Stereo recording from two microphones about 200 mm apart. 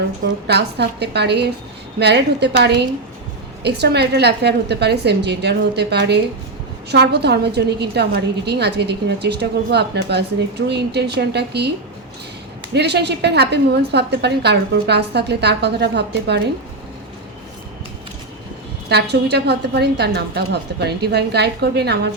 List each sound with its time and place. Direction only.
0.4 s a woman's voice: 55° right (ahead or behind)
12.7 s a woman's voice: 55° right (ahead or behind)
18.9 s a woman's voice: 55° right (ahead or behind)